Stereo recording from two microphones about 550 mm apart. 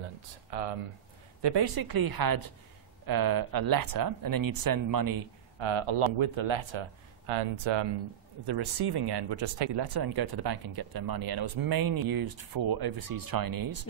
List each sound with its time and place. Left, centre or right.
0.5 s speech: right
1.4 s speech: right
5.6 s speech: right